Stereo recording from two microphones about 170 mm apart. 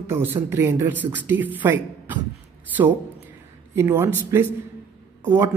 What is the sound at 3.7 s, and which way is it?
Speech, 15° right (ahead or behind).